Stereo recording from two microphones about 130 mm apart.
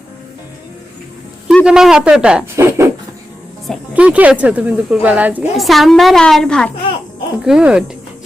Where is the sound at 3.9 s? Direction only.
10° right (ahead or behind).